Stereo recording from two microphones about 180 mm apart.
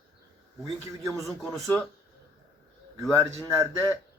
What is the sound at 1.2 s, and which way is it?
Speech, centre (ahead or behind).